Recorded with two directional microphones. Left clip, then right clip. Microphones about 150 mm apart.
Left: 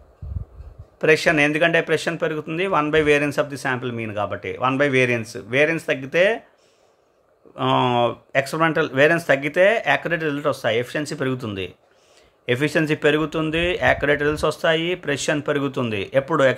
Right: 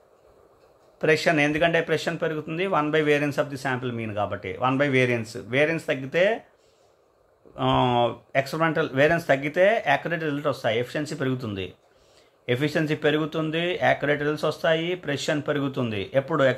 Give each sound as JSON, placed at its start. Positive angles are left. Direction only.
{"t": 0.9, "sound": "a man's voice", "side_deg": 20}
{"t": 7.5, "sound": "a man's voice", "side_deg": 20}